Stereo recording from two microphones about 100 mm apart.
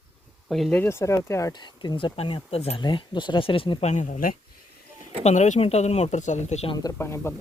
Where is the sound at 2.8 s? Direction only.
55° left (ahead or behind).